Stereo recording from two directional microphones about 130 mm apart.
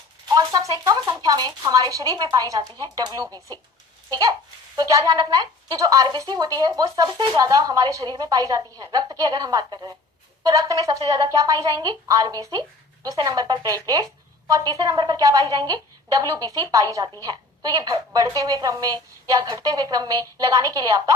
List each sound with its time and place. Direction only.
0.3 s a woman's voice: 25° right (ahead or behind)